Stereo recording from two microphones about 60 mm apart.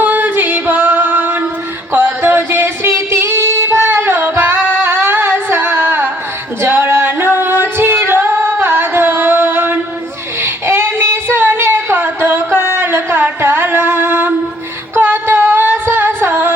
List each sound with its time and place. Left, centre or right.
0.0 s singing: right
1.9 s female singing: right
4.8 s music: right
6.6 s female singing: right
10.4 s child singing: right
12.5 s music: right
14.9 s singing: right